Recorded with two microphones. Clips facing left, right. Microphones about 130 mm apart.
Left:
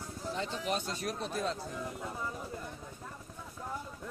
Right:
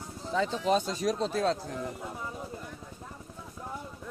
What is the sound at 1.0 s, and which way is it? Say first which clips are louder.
Speech: right 7 dB; 90° right.